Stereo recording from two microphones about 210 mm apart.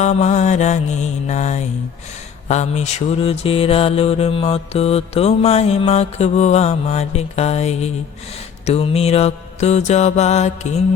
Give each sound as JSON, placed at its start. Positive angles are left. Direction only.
{"t": 0.0, "sound": "mantra", "side_deg": 35}